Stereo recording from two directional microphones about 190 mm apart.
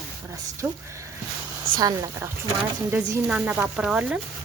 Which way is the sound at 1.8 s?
15° right (ahead or behind).